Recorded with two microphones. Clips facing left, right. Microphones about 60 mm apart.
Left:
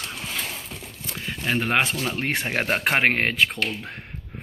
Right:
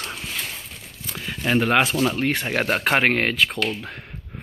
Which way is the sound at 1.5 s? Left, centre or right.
Centre.